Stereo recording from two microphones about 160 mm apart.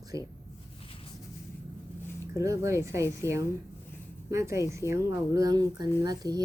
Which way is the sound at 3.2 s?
15° left (ahead or behind).